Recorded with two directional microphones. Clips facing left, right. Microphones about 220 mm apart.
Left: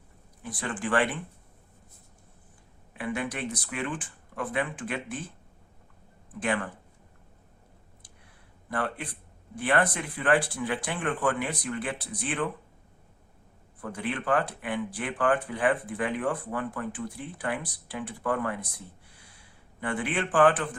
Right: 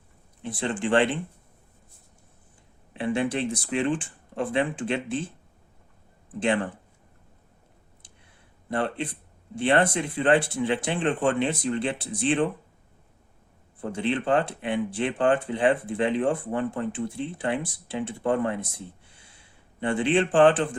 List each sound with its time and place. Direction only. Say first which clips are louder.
0.4 s speech: right 5 dB; 25° right (ahead or behind)
2.9 s speech: right 6 dB; 25° right (ahead or behind)
6.4 s speech: right 5 dB; 25° right (ahead or behind)
8.7 s speech: right 5 dB; 25° right (ahead or behind)
13.8 s speech: right 5 dB; 25° right (ahead or behind)